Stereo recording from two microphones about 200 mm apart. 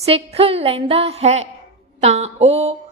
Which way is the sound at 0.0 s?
30° right (ahead or behind).